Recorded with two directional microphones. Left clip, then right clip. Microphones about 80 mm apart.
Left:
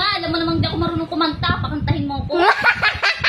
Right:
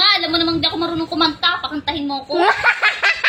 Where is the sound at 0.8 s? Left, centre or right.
Left.